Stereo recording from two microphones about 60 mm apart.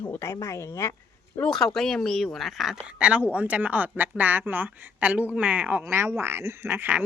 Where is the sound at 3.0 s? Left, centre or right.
Centre.